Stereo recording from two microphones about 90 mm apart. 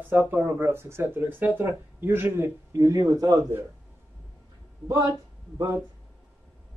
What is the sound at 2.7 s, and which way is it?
Speech, 40° right (ahead or behind).